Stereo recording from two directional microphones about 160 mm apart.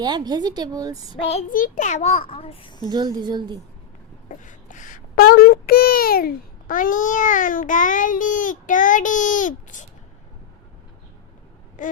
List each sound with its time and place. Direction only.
0.0 s a woman's voice: 25° right (ahead or behind)
1.1 s a child's voice: 40° left (ahead or behind)
1.5 s a child's voice: 60° left (ahead or behind); by 2.9 s 30° left (ahead or behind)
2.9 s a woman's voice: 25° right (ahead or behind)
4.3 s a child's voice: 50° left (ahead or behind)
11.8 s a sound: 55° left (ahead or behind)